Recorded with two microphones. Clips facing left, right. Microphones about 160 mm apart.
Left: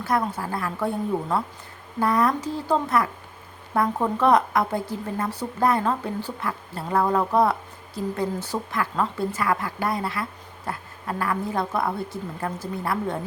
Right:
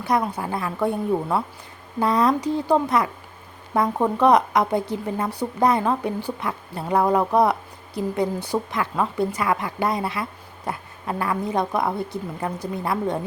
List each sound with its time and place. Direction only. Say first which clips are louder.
0.0 s a woman's voice: right 2 dB; 15° right (ahead or behind)